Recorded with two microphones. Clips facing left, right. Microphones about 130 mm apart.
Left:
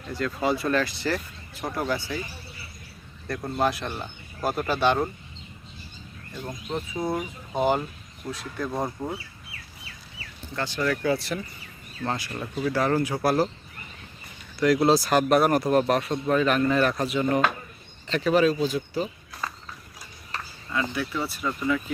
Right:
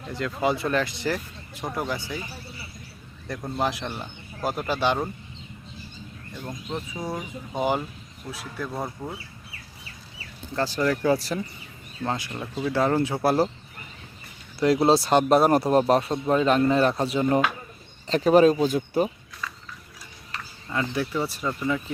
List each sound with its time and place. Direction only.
0.1 s speech: 20° right (ahead or behind)
3.2 s speech: 10° right (ahead or behind)
6.4 s speech: 5° left (ahead or behind)
8.3 s speech: 5° right (ahead or behind)
8.6 s speech: 15° left (ahead or behind)
10.5 s speech: 35° right (ahead or behind)
12.0 s speech: 20° right (ahead or behind)
14.6 s speech: 30° right (ahead or behind)
18.1 s speech: 40° right (ahead or behind)
19.3 s horse: 40° left (ahead or behind)
20.9 s speech: 35° right (ahead or behind)